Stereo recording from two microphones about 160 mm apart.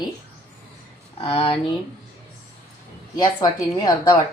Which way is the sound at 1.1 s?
35° left (ahead or behind).